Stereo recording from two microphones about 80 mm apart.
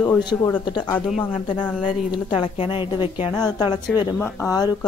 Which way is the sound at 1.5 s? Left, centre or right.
Left.